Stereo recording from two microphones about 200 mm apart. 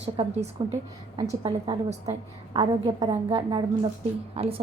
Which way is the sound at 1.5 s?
25° right (ahead or behind).